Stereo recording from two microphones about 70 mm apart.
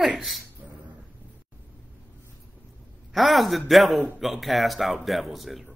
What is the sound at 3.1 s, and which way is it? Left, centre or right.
Speech, centre.